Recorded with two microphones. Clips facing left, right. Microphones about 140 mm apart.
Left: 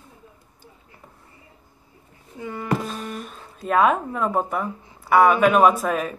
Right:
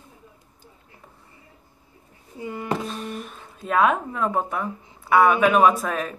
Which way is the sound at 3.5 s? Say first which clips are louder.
Left 2 dB; centre (ahead or behind).